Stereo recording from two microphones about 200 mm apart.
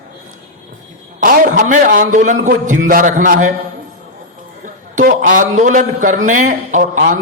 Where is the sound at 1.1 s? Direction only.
40° right (ahead or behind).